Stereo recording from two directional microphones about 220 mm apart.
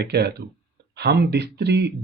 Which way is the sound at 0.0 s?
50° right (ahead or behind).